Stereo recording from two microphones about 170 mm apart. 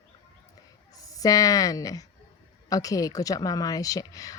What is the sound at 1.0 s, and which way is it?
A woman's voice, 20° left (ahead or behind).